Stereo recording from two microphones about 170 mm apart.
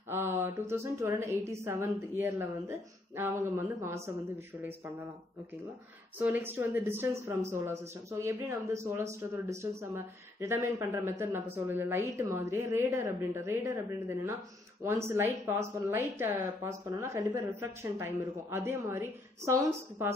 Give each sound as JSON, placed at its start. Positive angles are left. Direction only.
{"t": 0.1, "sound": "a woman's voice", "side_deg": -15}
{"t": 6.1, "sound": "a woman's voice", "side_deg": -10}